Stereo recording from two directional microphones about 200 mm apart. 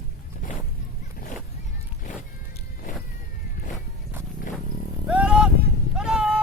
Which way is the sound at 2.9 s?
40° left (ahead or behind).